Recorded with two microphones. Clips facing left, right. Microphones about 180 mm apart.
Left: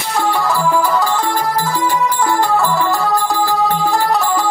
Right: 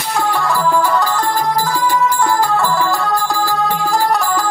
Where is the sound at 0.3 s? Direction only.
Centre (ahead or behind).